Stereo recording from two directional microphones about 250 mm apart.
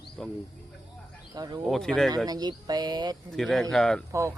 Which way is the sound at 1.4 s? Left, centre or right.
Centre.